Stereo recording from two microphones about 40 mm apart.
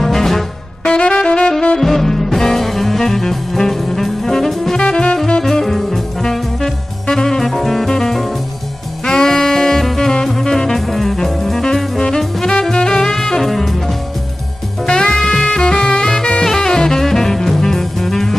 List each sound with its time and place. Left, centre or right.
0.0 s music: centre
0.8 s saxophone: left
1.8 s music: centre
4.7 s music: left
5.4 s music: centre
9.0 s saxophone: centre
12.7 s music: centre
14.9 s music: centre